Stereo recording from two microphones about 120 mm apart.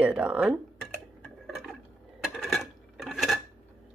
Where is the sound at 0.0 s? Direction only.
10° right (ahead or behind).